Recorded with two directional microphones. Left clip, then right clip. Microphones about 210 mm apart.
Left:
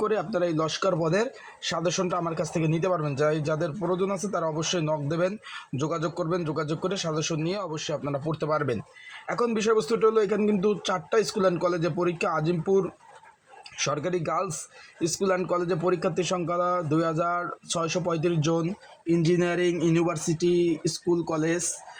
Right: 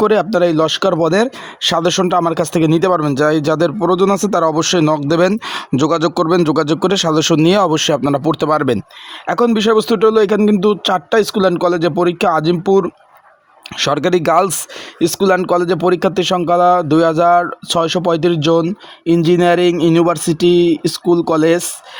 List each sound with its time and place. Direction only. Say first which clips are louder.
0.0 s speech: right 13 dB; 45° right (ahead or behind)